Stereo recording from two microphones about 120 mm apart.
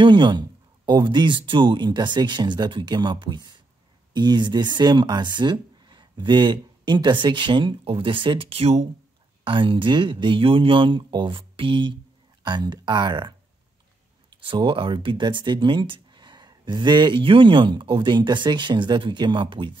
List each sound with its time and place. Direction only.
0.0 s speech: 40° right (ahead or behind); by 8.8 s 60° right (ahead or behind)
9.4 s speech: 45° right (ahead or behind)
14.4 s speech: 45° right (ahead or behind)